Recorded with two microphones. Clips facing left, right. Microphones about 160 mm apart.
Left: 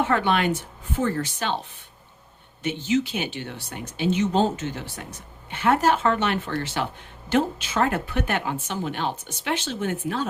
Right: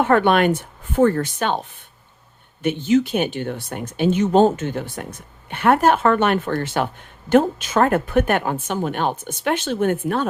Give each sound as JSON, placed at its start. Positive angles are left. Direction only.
{"t": 0.0, "sound": "speech", "side_deg": -55}
{"t": 2.6, "sound": "speech", "side_deg": -55}